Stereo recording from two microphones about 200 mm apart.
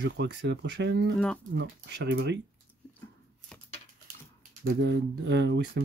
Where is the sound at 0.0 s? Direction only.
60° right (ahead or behind).